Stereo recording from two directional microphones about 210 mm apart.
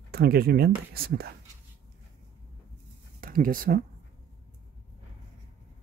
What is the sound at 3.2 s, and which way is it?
Speech, 40° right (ahead or behind).